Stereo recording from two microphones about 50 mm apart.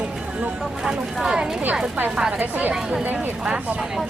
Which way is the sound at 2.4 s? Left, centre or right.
Right.